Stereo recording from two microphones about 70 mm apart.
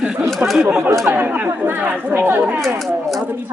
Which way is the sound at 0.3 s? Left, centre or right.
Centre.